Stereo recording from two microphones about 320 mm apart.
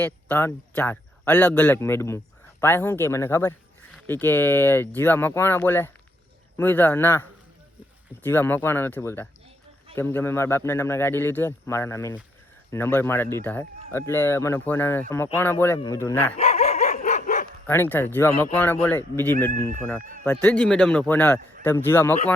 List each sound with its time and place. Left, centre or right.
0.0 s speech: centre
16.4 s dog: centre
17.7 s speech: centre
19.5 s speech: right
20.2 s a man's voice: centre